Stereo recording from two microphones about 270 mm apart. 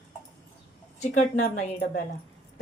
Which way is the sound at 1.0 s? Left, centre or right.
Left.